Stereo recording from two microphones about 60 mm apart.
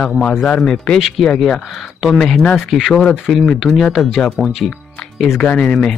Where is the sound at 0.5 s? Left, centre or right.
Centre.